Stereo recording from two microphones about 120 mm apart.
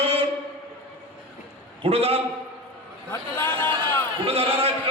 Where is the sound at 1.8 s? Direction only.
55° right (ahead or behind).